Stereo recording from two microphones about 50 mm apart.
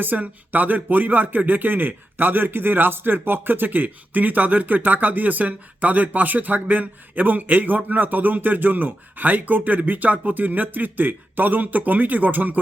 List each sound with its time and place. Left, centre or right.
0.0 s speech: right